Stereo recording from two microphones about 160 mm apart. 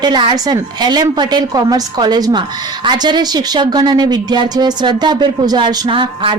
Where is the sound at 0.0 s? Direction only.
30° right (ahead or behind).